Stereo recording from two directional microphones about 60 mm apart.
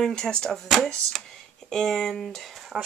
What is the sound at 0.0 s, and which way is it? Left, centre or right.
Speech, centre.